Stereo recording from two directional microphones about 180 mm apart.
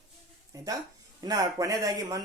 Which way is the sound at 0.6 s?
20° right (ahead or behind).